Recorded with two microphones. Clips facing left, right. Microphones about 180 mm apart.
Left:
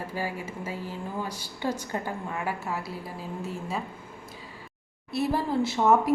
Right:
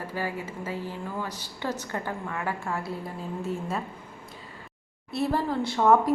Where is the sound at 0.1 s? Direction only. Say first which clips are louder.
Right 1 dB; 10° left (ahead or behind).